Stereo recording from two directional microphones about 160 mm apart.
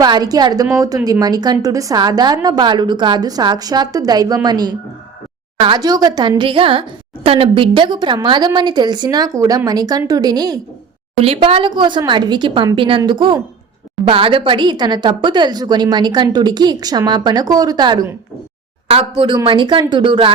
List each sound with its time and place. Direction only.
0.0 s a woman's voice: 25° right (ahead or behind)
11.2 s a woman's voice: 35° right (ahead or behind)